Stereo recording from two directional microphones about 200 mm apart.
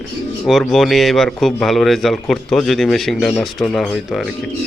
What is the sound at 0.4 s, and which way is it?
Speech, centre (ahead or behind).